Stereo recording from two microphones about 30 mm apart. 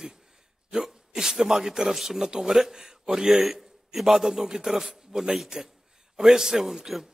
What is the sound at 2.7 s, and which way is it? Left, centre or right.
Speech, centre.